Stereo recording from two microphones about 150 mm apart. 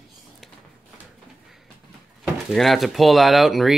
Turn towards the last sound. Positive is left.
turn(degrees=0)  # may be behind; listen again after turning